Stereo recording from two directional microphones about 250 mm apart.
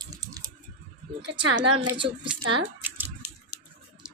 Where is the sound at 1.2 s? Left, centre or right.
Right.